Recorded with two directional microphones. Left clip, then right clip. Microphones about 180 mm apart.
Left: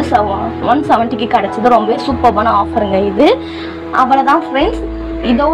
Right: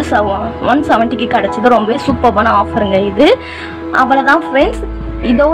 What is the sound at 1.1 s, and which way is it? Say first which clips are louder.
Speech: even; 20° right (ahead or behind).